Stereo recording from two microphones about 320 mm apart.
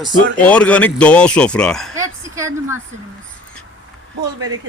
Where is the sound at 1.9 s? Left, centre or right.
Centre.